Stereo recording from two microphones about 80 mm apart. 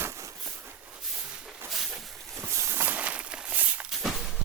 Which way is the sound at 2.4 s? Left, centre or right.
Right.